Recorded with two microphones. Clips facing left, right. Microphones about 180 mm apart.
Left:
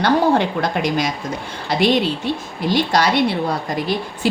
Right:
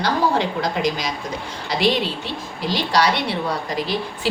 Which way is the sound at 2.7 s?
50° left (ahead or behind).